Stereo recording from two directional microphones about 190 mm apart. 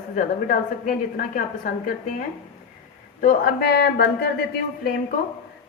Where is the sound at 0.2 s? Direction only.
40° left (ahead or behind).